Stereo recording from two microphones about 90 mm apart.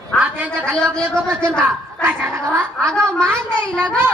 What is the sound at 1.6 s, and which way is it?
Speech, 20° right (ahead or behind).